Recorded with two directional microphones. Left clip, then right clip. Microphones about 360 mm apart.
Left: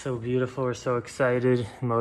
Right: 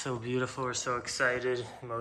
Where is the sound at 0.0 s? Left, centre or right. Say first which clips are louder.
Left 5 dB; centre.